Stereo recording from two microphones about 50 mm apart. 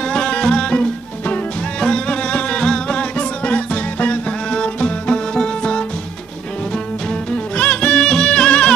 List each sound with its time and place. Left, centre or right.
0.1 s music: centre
7.5 s music: left